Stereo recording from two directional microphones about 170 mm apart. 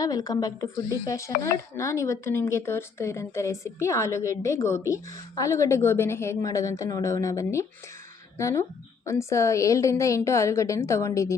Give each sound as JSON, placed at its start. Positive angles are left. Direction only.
{"t": 0.0, "sound": "a woman's voice", "side_deg": 20}